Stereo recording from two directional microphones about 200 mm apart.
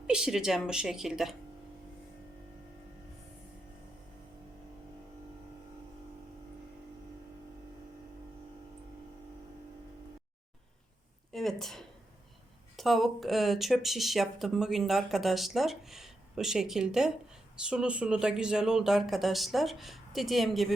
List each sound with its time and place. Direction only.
0.1 s speech: 5° right (ahead or behind)
11.3 s a sound: centre (ahead or behind)
12.7 s speech: centre (ahead or behind)